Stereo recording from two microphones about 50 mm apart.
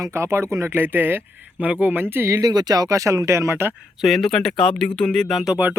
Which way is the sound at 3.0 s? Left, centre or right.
Right.